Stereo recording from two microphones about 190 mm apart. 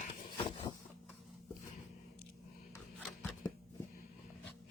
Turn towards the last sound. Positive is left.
turn(degrees=0)  # may be behind; listen again after turning